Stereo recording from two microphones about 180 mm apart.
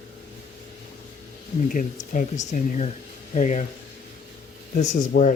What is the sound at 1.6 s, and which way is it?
Speech, 45° left (ahead or behind).